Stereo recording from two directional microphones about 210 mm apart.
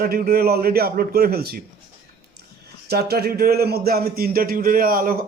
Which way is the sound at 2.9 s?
50° right (ahead or behind).